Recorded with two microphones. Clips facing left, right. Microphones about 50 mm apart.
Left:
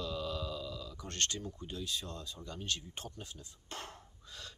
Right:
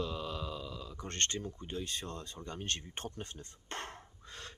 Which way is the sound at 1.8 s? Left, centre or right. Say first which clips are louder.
Even; right.